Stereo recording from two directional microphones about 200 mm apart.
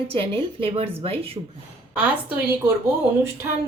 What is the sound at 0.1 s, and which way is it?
A woman's voice, 30° right (ahead or behind).